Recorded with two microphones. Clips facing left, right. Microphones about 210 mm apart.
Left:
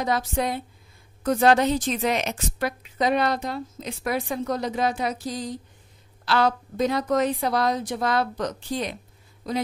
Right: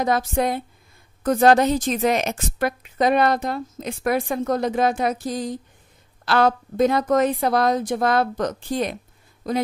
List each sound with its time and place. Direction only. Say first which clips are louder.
0.0 s a woman's voice: right 4 dB; 50° right (ahead or behind)